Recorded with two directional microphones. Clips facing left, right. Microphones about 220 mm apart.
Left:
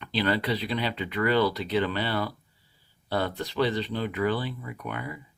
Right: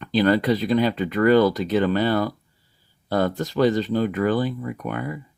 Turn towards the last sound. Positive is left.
turn(degrees=-45)  # may be behind; listen again after turning